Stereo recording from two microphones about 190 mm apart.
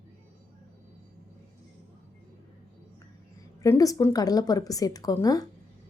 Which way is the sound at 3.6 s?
15° left (ahead or behind).